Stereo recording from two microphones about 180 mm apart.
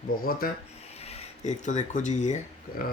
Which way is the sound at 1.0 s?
35° left (ahead or behind).